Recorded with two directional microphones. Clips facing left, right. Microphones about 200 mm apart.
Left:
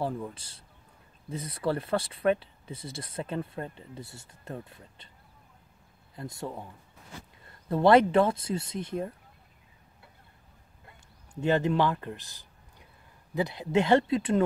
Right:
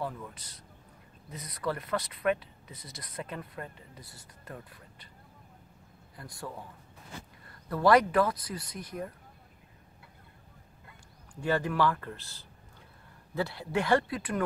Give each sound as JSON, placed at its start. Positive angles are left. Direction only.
{"t": 0.0, "sound": "speech", "side_deg": 30}
{"t": 6.1, "sound": "speech", "side_deg": 25}
{"t": 11.4, "sound": "speech", "side_deg": 25}